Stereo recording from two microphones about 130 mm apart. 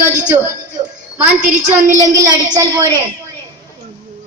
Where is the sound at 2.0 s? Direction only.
25° right (ahead or behind).